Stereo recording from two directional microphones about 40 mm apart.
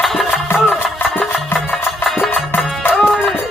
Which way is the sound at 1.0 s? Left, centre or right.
Left.